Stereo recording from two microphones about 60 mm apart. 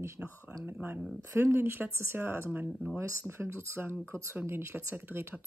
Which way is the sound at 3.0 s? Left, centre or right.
Right.